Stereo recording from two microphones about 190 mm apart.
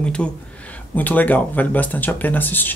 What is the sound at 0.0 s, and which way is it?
Speech, 5° left (ahead or behind).